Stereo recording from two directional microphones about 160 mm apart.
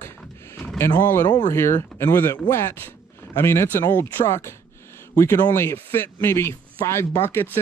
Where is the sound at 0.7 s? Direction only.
15° left (ahead or behind).